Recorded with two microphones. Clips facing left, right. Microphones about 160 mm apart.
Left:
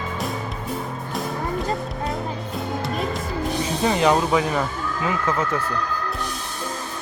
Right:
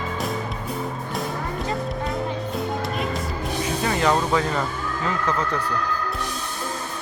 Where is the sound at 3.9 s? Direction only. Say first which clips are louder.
Left 2 dB; 20° left (ahead or behind).